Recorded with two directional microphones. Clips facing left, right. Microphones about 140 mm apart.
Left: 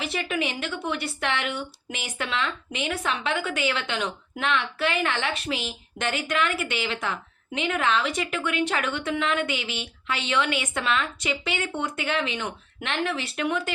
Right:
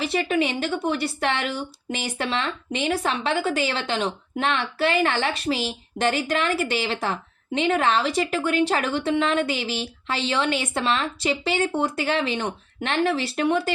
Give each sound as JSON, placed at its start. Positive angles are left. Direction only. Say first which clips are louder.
{"t": 0.0, "sound": "speech", "louder": "right 5 dB", "side_deg": -35}